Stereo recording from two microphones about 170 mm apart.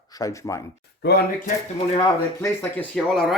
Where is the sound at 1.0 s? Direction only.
75° left (ahead or behind).